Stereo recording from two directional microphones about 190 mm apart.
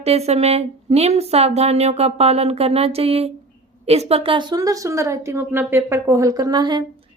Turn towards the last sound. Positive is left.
turn(degrees=-20)  # may be behind; listen again after turning